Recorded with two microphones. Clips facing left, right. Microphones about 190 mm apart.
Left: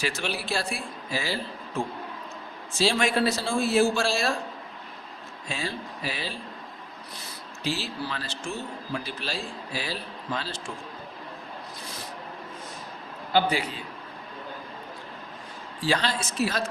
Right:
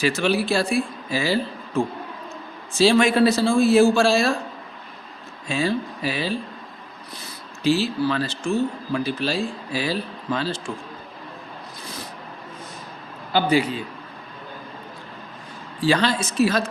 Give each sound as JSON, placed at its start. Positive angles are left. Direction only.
{"t": 0.0, "sound": "a man's voice", "side_deg": -85}
{"t": 2.7, "sound": "a man's voice", "side_deg": -85}
{"t": 5.5, "sound": "a man's voice", "side_deg": -80}
{"t": 7.6, "sound": "a man's voice", "side_deg": -75}
{"t": 13.3, "sound": "speech", "side_deg": -90}
{"t": 15.8, "sound": "speech", "side_deg": -85}